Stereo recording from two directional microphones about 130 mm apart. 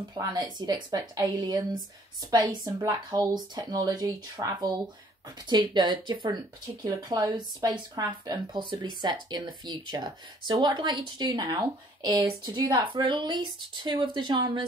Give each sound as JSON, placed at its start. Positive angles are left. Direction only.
{"t": 0.3, "sound": "speech", "side_deg": -35}